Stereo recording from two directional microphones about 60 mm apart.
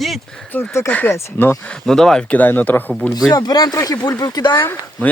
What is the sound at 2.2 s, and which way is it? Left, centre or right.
Speech, left.